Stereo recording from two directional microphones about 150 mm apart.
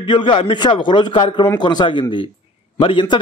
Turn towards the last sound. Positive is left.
turn(degrees=35)  # may be behind; listen again after turning